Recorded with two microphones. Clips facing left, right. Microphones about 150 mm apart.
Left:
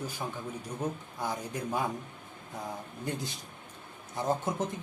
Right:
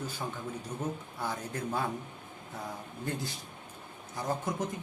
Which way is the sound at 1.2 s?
15° left (ahead or behind).